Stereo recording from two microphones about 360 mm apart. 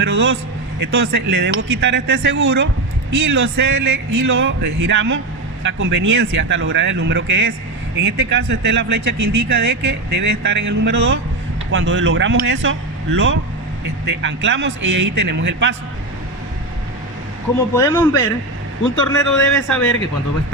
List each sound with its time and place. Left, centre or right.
0.0 s speech: right
9.1 s speech: right
9.5 s speech: right
17.7 s speech: centre
19.1 s speech: centre